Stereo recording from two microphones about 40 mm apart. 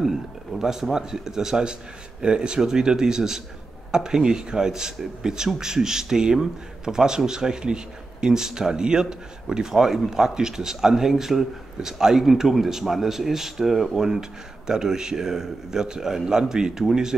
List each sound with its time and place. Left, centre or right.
0.6 s speech: centre